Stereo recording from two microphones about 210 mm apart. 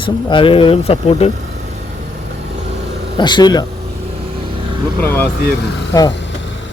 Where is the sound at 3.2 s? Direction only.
20° left (ahead or behind).